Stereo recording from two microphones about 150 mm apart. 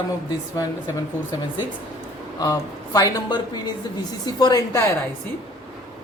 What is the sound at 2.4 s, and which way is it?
Speech, 25° left (ahead or behind).